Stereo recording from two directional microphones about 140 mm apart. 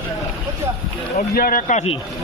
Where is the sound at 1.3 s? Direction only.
85° left.